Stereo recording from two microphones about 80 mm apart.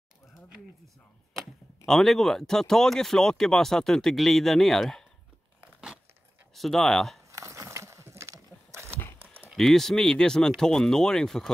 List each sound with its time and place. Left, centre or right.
1.9 s speech: centre
5.6 s crumpling: centre
6.5 s speech: centre
7.2 s a sound: right
9.6 s speech: centre